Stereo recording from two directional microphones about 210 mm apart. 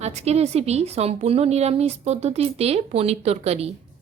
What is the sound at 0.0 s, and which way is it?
A woman's voice, 30° right (ahead or behind).